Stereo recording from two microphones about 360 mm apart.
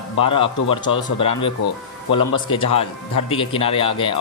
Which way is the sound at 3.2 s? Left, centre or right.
Centre.